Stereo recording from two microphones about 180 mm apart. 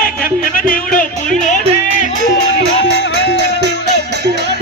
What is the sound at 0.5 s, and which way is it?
Music, 50° left (ahead or behind).